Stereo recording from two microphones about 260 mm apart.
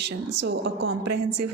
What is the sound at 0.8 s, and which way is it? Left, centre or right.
Speech, right.